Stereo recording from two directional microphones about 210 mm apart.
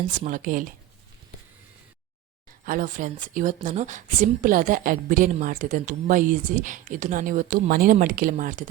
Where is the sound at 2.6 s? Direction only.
40° right (ahead or behind).